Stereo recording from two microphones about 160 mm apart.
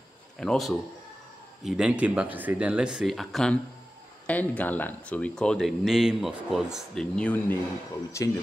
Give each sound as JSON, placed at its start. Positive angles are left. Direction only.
{"t": 0.4, "sound": "speech", "side_deg": 0}
{"t": 8.2, "sound": "speech", "side_deg": 20}